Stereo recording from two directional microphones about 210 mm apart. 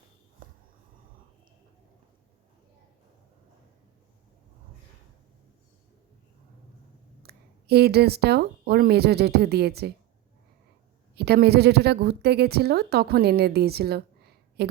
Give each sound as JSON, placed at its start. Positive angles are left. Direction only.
{"t": 0.4, "sound": "a sound", "side_deg": -40}
{"t": 7.2, "sound": "speech", "side_deg": -50}
{"t": 11.1, "sound": "a woman's voice", "side_deg": -50}